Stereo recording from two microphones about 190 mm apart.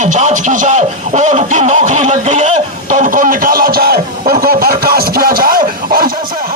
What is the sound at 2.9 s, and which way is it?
Music, 45° right (ahead or behind).